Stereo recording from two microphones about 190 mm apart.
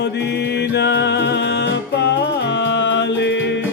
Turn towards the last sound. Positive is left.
turn(degrees=65)  # may be behind; listen again after turning